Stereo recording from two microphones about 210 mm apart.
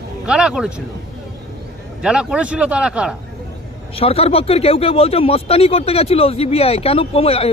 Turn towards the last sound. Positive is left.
turn(degrees=30)  # may be behind; listen again after turning